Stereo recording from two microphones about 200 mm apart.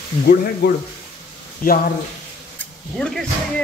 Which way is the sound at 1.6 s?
45° left (ahead or behind).